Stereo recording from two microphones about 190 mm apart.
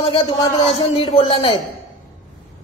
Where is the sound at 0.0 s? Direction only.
30° left (ahead or behind).